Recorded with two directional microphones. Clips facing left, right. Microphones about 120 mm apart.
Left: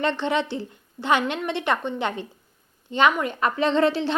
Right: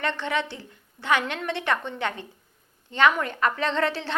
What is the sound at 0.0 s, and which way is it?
A woman's voice, 25° left (ahead or behind).